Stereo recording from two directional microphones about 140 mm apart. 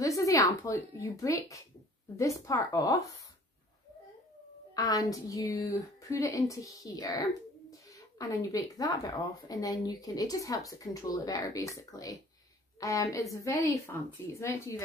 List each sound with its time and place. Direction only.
0.0 s a woman's voice: 25° left (ahead or behind)
4.7 s a woman's voice: 25° left (ahead or behind)